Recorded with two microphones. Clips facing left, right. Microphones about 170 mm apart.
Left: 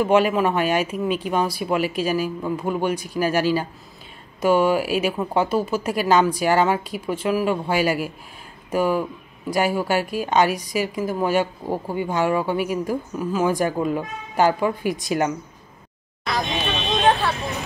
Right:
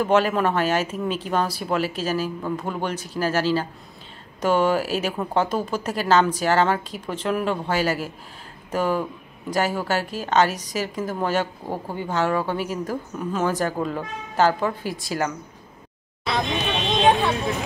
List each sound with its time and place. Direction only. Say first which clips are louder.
0.0 s a woman's voice: left 2 dB; 10° left (ahead or behind)
17.0 s vehicle: right 1 dB; 15° right (ahead or behind)